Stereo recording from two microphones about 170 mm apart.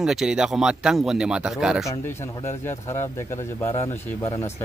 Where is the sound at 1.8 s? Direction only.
15° left (ahead or behind).